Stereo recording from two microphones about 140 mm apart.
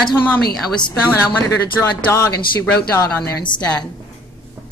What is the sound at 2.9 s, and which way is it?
Speech, 20° left (ahead or behind).